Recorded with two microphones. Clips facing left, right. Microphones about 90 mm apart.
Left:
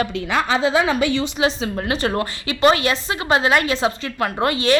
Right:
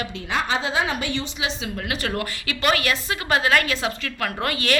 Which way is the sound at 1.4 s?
35° left (ahead or behind).